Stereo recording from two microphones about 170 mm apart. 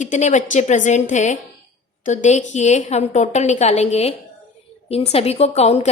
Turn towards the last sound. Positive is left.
turn(degrees=40)  # may be behind; listen again after turning